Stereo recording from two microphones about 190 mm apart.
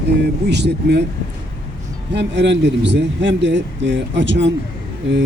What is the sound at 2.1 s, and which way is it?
Speech, 65° right (ahead or behind).